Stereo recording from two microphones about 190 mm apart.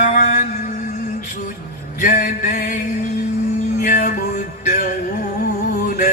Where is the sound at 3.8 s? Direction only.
45° left (ahead or behind).